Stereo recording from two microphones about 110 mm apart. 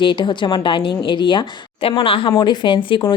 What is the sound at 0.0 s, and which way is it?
Speech, 45° left (ahead or behind).